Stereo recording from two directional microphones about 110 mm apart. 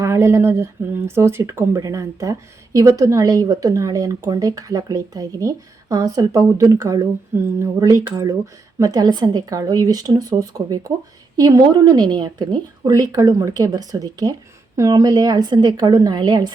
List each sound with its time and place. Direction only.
0.0 s a woman's voice: 25° right (ahead or behind); by 16.5 s 40° right (ahead or behind)